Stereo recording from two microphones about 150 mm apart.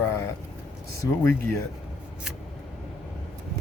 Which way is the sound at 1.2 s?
20° left (ahead or behind).